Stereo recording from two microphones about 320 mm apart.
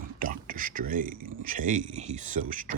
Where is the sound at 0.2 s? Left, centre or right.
Right.